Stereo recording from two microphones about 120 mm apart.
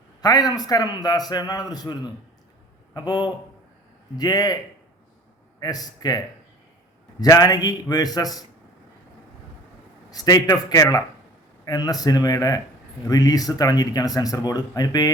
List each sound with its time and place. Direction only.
0.2 s a man's voice: 35° left (ahead or behind)
5.5 s a man's voice: 30° left (ahead or behind)
10.1 s a man's voice: 30° left (ahead or behind)